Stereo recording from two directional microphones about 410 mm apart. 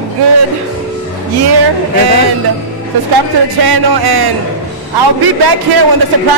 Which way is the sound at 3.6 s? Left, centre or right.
Right.